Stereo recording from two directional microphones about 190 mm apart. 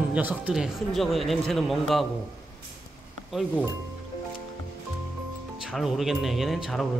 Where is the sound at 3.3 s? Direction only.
Centre (ahead or behind).